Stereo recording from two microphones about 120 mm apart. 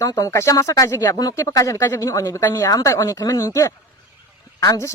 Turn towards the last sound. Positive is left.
turn(degrees=30)  # may be behind; listen again after turning